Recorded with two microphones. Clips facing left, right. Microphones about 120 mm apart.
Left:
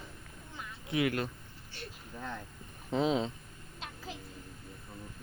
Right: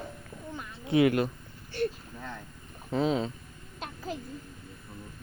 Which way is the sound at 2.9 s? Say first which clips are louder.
Right 2 dB; 20° left (ahead or behind).